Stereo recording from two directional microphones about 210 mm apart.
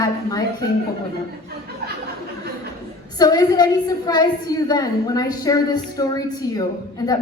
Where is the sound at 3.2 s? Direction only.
20° left (ahead or behind).